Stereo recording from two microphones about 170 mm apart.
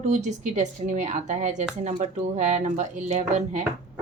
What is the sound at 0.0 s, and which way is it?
Speech, 40° right (ahead or behind).